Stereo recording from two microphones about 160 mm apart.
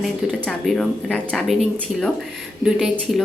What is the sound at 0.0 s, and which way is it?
Speech, centre (ahead or behind).